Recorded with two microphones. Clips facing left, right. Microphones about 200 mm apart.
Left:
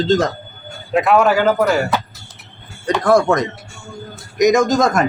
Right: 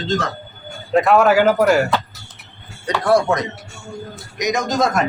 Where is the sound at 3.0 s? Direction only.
45° left (ahead or behind).